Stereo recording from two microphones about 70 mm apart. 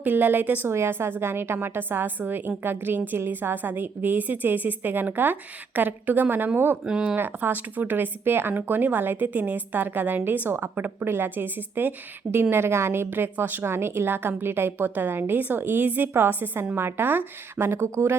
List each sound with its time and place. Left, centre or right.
0.0 s a woman's voice: right
0.7 s a woman's voice: right
6.8 s speech: centre
7.2 s speech: right